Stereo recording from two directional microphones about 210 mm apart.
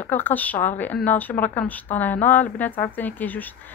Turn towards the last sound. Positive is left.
turn(degrees=10)  # may be behind; listen again after turning